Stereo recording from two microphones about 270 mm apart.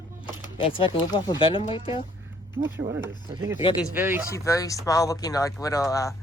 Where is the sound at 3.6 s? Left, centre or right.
Centre.